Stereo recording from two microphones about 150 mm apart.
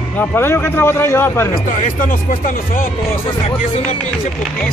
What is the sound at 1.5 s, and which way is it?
Speech, 65° left (ahead or behind).